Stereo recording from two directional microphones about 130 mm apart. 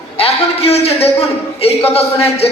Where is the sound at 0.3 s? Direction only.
50° left (ahead or behind).